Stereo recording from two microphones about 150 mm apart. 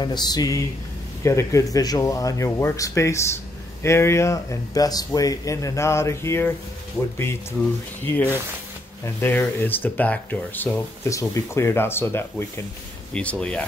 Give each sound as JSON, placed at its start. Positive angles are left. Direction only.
{"t": 0.0, "sound": "speech", "side_deg": 30}
{"t": 8.0, "sound": "speech", "side_deg": 15}